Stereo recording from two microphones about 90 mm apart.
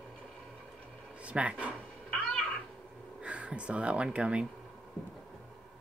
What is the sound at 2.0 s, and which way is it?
Cat, 15° left (ahead or behind).